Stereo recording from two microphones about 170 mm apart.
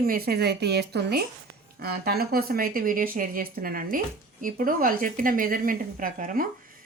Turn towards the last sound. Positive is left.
turn(degrees=-55)  # may be behind; listen again after turning